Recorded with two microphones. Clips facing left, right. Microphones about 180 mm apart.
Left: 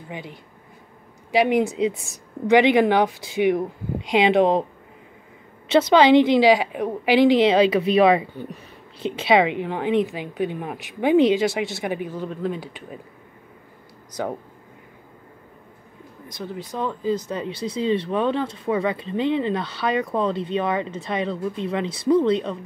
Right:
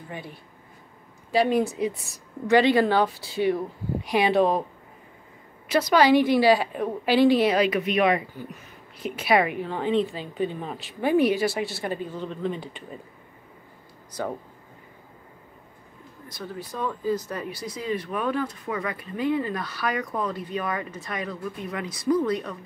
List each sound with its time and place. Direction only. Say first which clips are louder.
0.1 s a woman's voice: left 3 dB; 15° left (ahead or behind)
5.7 s a woman's voice: left 4 dB; 25° left (ahead or behind)
16.3 s speech: left 3 dB; 20° left (ahead or behind)